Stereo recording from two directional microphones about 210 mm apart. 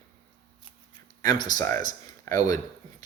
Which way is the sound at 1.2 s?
20° left (ahead or behind).